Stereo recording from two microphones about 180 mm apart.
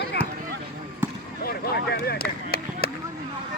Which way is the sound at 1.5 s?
65° left (ahead or behind).